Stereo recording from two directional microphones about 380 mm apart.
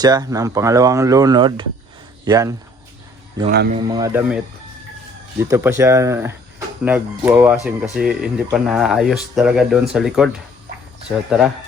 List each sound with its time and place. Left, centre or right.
0.0 s speech: centre
3.5 s a man's voice: right
3.8 s speech: centre
5.4 s speech: centre